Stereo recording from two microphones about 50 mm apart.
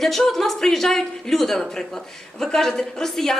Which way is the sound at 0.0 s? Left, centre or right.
Centre.